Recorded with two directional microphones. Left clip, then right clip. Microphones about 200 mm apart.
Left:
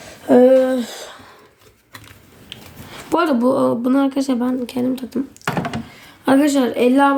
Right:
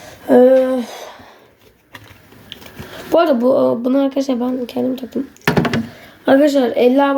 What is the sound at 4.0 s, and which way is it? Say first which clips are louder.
Speech: right 2 dB; 75° left (ahead or behind).